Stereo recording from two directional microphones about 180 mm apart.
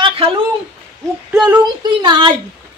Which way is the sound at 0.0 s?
30° right (ahead or behind).